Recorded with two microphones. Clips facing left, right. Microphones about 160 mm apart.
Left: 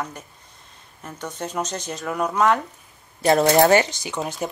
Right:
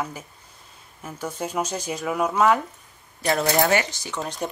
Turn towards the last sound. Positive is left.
turn(degrees=15)  # may be behind; listen again after turning